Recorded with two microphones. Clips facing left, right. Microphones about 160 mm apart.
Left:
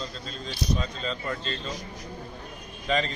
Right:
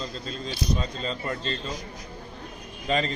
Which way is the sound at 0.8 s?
40° right (ahead or behind).